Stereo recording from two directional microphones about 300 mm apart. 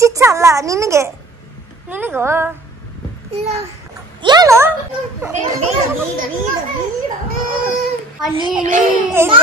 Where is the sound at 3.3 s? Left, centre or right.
Right.